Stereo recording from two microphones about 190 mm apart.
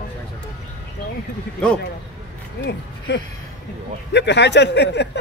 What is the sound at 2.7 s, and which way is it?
Speech, 60° left (ahead or behind).